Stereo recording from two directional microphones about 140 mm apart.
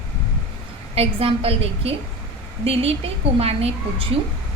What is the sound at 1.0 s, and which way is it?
A woman's voice, 45° right (ahead or behind).